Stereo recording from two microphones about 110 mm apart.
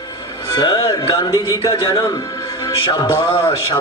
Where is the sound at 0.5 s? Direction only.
40° left (ahead or behind).